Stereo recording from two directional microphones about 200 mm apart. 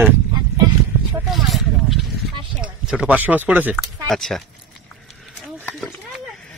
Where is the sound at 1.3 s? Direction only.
Centre (ahead or behind).